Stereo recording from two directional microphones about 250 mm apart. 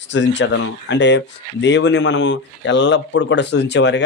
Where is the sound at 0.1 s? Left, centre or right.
Left.